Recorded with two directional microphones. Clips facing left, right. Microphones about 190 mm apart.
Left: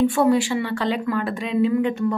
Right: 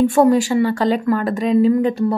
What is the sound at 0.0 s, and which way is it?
A woman's voice, 45° right (ahead or behind).